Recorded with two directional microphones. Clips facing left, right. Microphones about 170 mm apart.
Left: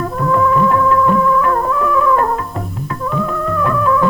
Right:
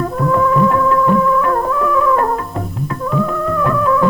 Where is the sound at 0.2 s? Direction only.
20° right (ahead or behind).